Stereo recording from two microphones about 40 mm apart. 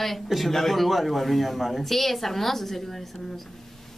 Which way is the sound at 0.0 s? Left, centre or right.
Centre.